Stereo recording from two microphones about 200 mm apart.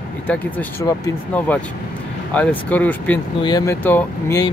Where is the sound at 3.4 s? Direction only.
20° left (ahead or behind).